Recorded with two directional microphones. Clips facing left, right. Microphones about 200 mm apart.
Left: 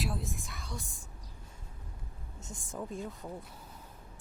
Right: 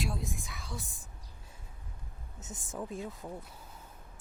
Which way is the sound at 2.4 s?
Centre (ahead or behind).